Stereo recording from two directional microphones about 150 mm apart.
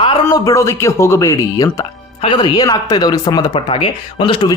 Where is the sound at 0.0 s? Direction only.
25° left (ahead or behind).